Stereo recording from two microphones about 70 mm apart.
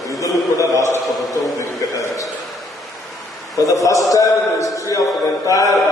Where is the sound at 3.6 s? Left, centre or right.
Left.